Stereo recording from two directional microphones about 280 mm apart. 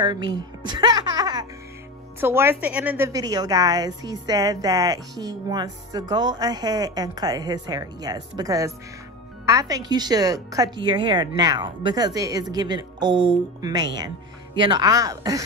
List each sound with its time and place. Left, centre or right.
0.0 s a woman's voice: centre